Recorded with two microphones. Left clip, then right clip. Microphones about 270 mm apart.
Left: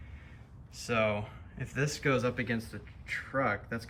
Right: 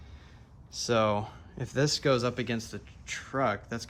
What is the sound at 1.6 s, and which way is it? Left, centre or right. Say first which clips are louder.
Speech: right 5 dB; centre.